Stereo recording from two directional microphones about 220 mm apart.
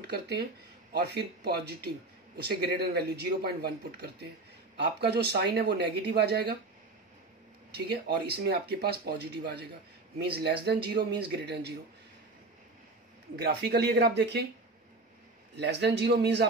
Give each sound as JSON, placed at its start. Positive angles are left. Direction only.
{"t": 0.1, "sound": "speech", "side_deg": -45}
{"t": 7.7, "sound": "speech", "side_deg": -45}
{"t": 13.4, "sound": "speech", "side_deg": -45}
{"t": 15.5, "sound": "speech", "side_deg": -50}